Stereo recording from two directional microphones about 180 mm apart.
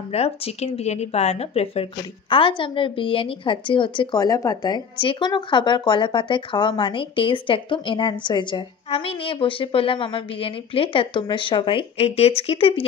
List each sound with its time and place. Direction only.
0.1 s speech: 35° left (ahead or behind)